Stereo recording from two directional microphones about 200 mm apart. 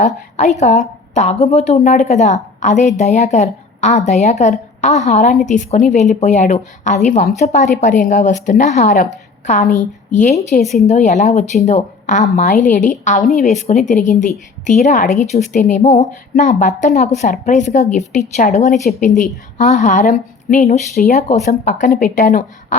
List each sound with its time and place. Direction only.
0.0 s a woman's voice: 35° left (ahead or behind)
10.6 s a woman's voice: centre (ahead or behind)
10.8 s a woman's voice: 35° left (ahead or behind)